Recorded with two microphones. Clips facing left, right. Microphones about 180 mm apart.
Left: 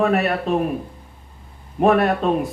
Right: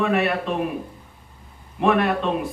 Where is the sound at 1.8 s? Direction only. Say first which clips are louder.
Left 3 dB; 40° left (ahead or behind).